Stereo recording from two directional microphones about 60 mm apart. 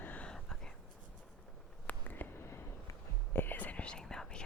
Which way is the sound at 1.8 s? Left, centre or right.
Left.